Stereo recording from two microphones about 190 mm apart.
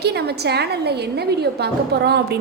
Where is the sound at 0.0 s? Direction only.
60° right (ahead or behind).